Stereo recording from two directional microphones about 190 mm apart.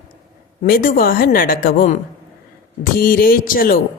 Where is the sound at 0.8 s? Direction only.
50° left (ahead or behind).